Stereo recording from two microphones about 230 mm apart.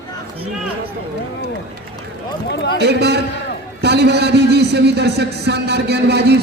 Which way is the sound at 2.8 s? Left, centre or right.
Right.